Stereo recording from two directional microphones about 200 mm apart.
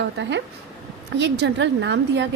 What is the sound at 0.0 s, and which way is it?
A woman's voice, 60° right (ahead or behind).